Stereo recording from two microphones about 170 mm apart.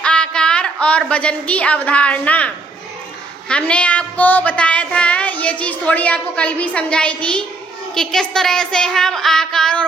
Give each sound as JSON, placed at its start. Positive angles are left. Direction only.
{"t": 0.0, "sound": "a woman's voice", "side_deg": 5}
{"t": 3.5, "sound": "a woman's voice", "side_deg": 5}